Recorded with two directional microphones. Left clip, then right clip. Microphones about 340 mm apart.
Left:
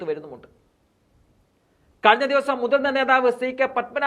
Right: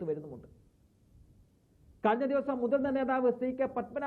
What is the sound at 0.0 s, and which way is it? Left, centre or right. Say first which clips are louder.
Speech: left 8 dB; centre.